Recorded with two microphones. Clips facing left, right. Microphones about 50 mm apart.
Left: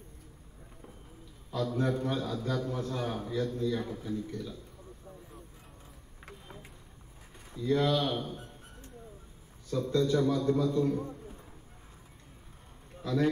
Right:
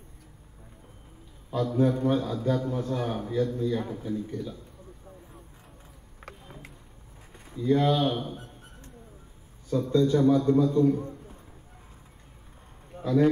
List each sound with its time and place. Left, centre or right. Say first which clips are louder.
1.5 s a man's voice: right 6 dB; right
7.6 s a man's voice: right 4 dB; right
9.7 s a man's voice: right 5 dB; centre
10.0 s a man's voice: right 7 dB; right
12.9 s a sound: right 7 dB; right